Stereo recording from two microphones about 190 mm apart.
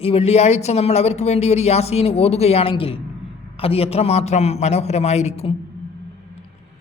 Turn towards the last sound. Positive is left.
turn(degrees=35)  # may be behind; listen again after turning